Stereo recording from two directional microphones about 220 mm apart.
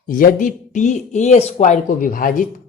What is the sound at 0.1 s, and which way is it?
Speech, 35° left (ahead or behind).